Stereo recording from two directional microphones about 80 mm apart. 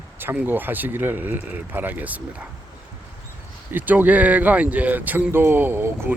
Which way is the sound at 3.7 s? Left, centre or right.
Right.